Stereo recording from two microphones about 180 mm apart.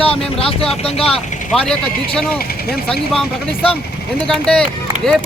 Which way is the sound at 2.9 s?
5° left (ahead or behind).